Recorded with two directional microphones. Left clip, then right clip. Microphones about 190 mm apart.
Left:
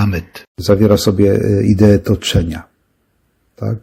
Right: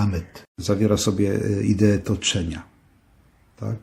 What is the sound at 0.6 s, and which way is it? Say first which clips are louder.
Speech: left 10 dB; 30° left (ahead or behind).